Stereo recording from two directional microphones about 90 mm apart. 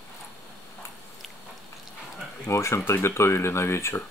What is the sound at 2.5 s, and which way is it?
Speech, 30° left (ahead or behind).